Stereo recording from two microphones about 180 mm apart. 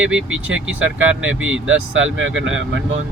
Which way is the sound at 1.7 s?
90° right.